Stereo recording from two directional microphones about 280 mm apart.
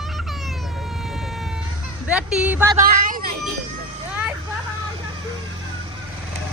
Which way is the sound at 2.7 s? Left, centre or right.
Right.